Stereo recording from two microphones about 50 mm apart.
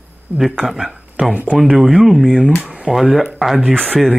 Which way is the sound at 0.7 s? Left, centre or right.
Centre.